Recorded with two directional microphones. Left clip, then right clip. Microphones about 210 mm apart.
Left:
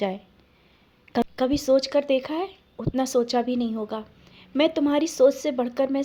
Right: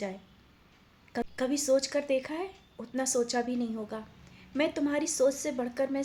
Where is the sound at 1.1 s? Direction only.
30° left (ahead or behind).